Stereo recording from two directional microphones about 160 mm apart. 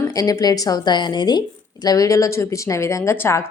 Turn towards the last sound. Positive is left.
turn(degrees=15)  # may be behind; listen again after turning